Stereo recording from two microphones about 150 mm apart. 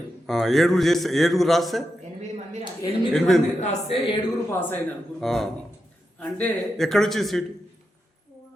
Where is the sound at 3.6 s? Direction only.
45° left (ahead or behind).